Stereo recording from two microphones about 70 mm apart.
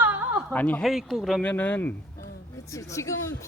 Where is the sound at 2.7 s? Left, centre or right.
Left.